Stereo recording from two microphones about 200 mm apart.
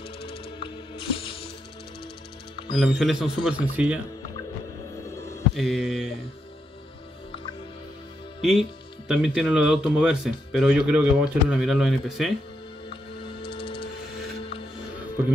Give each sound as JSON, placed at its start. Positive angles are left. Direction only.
{"t": 0.2, "sound": "music", "side_deg": 25}
{"t": 2.7, "sound": "speech", "side_deg": 0}
{"t": 5.1, "sound": "music", "side_deg": 15}
{"t": 5.5, "sound": "speech", "side_deg": 0}
{"t": 9.0, "sound": "speech", "side_deg": -5}
{"t": 12.9, "sound": "music", "side_deg": 25}